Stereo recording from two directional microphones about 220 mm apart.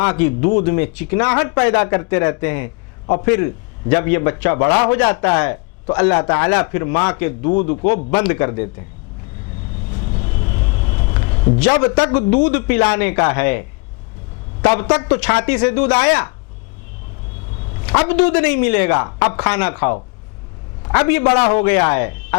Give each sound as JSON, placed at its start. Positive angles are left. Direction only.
{"t": 0.0, "sound": "speech", "side_deg": 10}
{"t": 9.9, "sound": "vehicle", "side_deg": 20}
{"t": 10.4, "sound": "vehicle", "side_deg": 35}
{"t": 10.7, "sound": "vehicle", "side_deg": 20}
{"t": 11.1, "sound": "a sound", "side_deg": 20}
{"t": 12.1, "sound": "a man's voice", "side_deg": 10}
{"t": 17.7, "sound": "a man's voice", "side_deg": 15}
{"t": 21.2, "sound": "a man's voice", "side_deg": 20}
{"t": 21.6, "sound": "speech", "side_deg": 10}